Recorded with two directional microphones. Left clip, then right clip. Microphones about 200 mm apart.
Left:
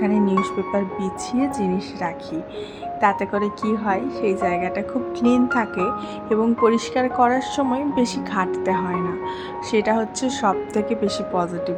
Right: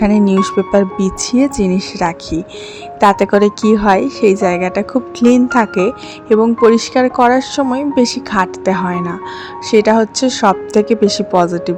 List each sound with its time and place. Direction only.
0.0 s a woman's voice: 40° right (ahead or behind)